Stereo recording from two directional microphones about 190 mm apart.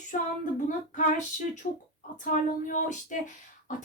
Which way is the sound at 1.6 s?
40° left (ahead or behind).